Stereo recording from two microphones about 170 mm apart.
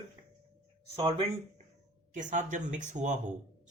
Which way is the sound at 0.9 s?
35° right (ahead or behind).